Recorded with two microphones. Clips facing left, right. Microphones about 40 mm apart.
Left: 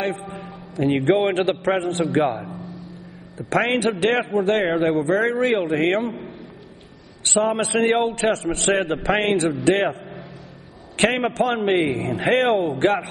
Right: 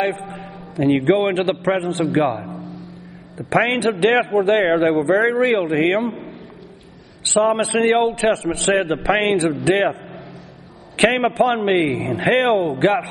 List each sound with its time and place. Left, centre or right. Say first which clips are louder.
0.4 s a man's voice: right 2 dB; centre
7.2 s a man's voice: right 4 dB; centre